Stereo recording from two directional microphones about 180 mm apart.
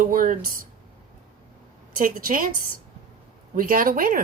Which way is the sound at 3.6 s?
50° right (ahead or behind).